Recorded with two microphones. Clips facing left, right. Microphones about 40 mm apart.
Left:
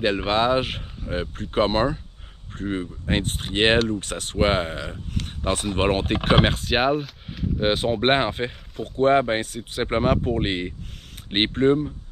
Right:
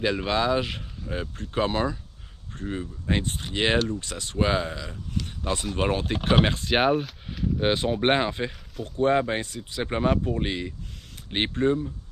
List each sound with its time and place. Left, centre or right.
0.0 s speech: left
5.1 s a sound: left
5.7 s speech: left
6.6 s speech: centre; by 11.9 s left